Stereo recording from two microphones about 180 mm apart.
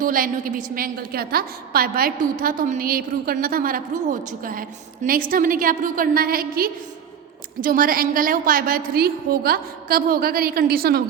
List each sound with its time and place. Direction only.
0.0 s a woman's voice: 50° right (ahead or behind)